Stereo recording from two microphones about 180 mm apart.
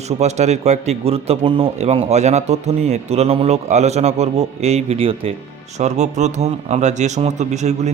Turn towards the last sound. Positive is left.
turn(degrees=-40)  # may be behind; listen again after turning